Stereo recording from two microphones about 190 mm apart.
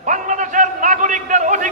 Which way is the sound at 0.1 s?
40° right (ahead or behind).